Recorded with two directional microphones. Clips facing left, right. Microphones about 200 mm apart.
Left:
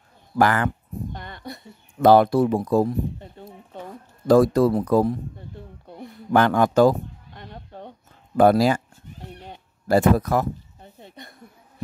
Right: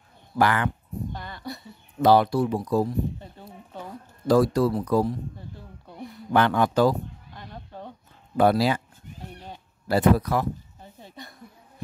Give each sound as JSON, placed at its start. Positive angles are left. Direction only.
{"t": 0.4, "sound": "speech", "side_deg": 45}
{"t": 1.2, "sound": "a sound", "side_deg": 20}
{"t": 1.6, "sound": "speech", "side_deg": 50}
{"t": 4.3, "sound": "speech", "side_deg": 50}
{"t": 6.3, "sound": "speech", "side_deg": 45}
{"t": 8.4, "sound": "speech", "side_deg": 45}
{"t": 9.8, "sound": "speech", "side_deg": 45}
{"t": 11.0, "sound": "a sound", "side_deg": 20}